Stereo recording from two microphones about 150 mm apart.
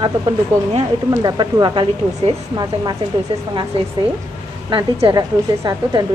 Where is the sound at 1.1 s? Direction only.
25° right (ahead or behind).